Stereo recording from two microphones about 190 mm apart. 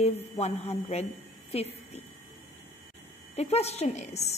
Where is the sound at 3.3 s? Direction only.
35° left (ahead or behind).